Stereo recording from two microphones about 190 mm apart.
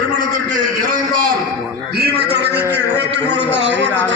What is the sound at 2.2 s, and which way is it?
Speech, 60° right (ahead or behind).